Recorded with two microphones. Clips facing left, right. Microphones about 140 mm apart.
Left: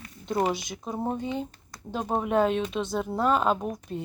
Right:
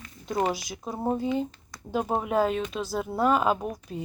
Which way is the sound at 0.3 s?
Centre (ahead or behind).